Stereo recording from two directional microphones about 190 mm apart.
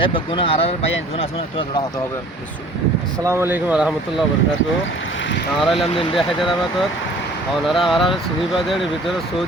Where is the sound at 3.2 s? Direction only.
10° right (ahead or behind).